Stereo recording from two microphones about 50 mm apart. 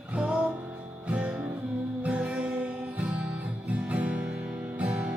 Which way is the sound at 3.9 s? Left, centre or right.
Right.